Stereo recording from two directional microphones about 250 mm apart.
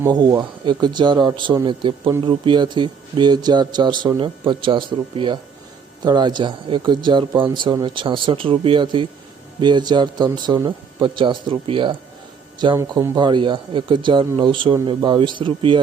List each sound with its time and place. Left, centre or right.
0.0 s speech: centre